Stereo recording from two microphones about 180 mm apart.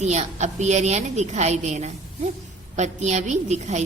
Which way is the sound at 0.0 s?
40° right (ahead or behind).